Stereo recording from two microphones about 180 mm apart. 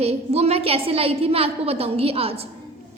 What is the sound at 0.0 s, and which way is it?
A woman's voice, 35° right (ahead or behind).